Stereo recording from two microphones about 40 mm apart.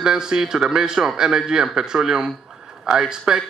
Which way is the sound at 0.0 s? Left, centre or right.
Centre.